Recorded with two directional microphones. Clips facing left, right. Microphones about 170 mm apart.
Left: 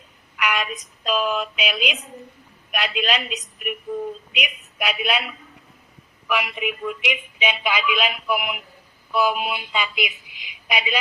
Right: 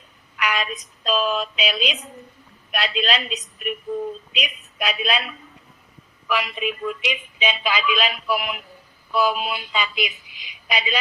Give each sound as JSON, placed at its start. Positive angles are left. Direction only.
{"t": 0.3, "sound": "speech", "side_deg": 10}